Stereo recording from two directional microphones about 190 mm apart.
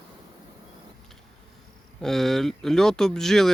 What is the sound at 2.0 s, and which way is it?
Speech, centre (ahead or behind).